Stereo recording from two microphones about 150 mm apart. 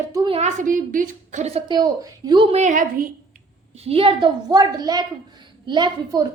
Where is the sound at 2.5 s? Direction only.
55° right (ahead or behind).